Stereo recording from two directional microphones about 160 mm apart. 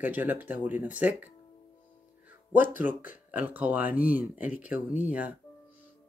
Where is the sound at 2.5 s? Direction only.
10° right (ahead or behind).